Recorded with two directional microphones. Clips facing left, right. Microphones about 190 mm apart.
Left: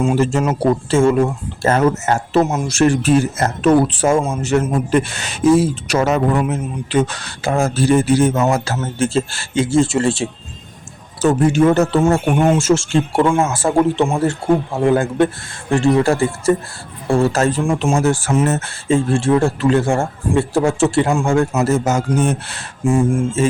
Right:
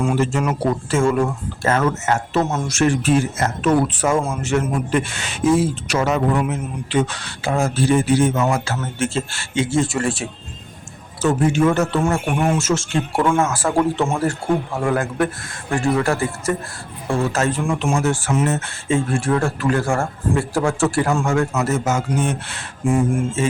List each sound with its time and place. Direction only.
0.2 s speech: 35° left (ahead or behind)
4.4 s speech: 40° left (ahead or behind)
11.2 s speech: 35° left (ahead or behind)
18.0 s speech: 40° left (ahead or behind)